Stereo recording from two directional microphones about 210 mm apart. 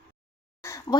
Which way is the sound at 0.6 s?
15° left (ahead or behind).